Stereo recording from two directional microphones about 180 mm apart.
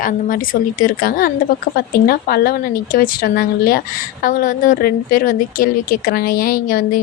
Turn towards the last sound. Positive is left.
turn(degrees=55)  # may be behind; listen again after turning